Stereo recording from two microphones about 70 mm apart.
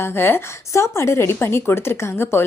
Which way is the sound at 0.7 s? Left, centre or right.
Left.